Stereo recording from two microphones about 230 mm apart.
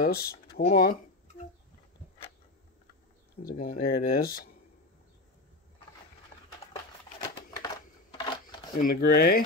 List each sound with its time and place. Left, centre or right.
0.0 s speech: left
3.4 s speech: left
7.5 s a sound: centre
8.7 s speech: left